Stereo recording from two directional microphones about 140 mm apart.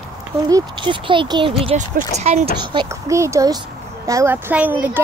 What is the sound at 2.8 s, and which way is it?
Speech, 20° right (ahead or behind).